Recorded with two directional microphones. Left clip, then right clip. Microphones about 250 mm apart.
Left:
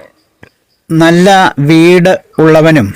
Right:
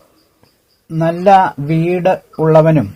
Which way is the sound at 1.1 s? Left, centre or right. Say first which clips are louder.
Left 3 dB; left.